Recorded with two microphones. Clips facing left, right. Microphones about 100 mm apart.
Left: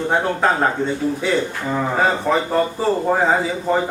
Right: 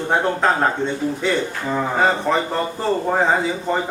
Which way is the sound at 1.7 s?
Centre (ahead or behind).